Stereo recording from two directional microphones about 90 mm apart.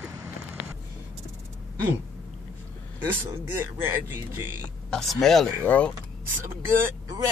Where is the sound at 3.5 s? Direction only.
25° right (ahead or behind).